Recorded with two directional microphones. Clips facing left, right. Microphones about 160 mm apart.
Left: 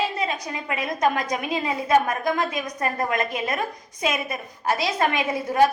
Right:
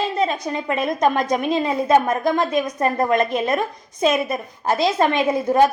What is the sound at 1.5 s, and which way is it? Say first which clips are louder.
A woman's voice: right 3 dB; 30° right (ahead or behind).